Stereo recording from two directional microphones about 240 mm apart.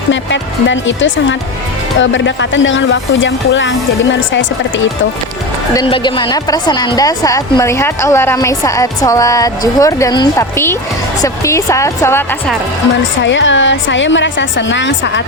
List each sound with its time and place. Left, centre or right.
0.1 s speech: left
5.7 s a woman's voice: left
13.2 s speech: left